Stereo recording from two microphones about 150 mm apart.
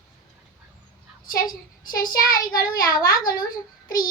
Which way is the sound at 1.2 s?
65° left (ahead or behind).